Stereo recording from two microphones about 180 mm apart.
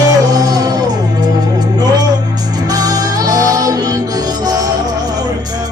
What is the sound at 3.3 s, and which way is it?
Music, 20° right (ahead or behind).